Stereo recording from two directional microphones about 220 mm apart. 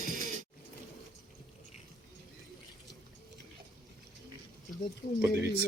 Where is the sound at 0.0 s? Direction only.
40° right (ahead or behind).